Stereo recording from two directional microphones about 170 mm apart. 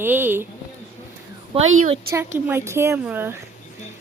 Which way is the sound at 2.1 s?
15° right (ahead or behind).